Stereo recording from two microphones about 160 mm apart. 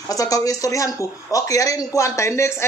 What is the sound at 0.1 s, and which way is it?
Speech, 20° left (ahead or behind).